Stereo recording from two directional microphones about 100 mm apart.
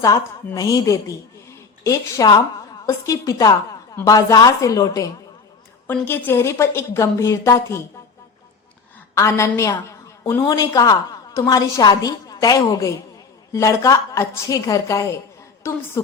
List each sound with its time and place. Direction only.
0.5 s a woman's voice: 35° left (ahead or behind)
5.9 s a woman's voice: 20° left (ahead or behind)
9.1 s a woman's voice: 30° left (ahead or behind)